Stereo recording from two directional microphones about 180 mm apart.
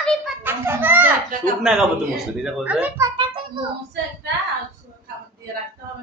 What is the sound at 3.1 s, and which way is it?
Speech, 25° right (ahead or behind).